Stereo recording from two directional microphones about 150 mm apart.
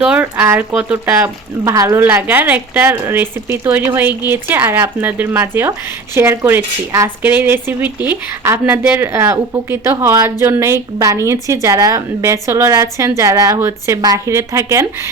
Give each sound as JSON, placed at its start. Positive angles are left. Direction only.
{"t": 0.0, "sound": "a woman's voice", "side_deg": -5}